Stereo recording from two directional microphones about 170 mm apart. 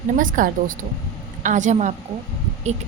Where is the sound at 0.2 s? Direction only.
50° right (ahead or behind).